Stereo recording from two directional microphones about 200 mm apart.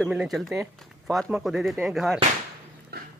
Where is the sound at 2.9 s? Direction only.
50° right (ahead or behind).